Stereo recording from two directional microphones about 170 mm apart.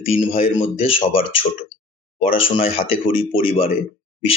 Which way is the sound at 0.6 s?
35° left (ahead or behind).